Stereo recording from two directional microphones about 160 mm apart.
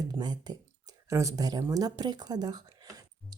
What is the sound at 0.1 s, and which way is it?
Speech, 25° right (ahead or behind).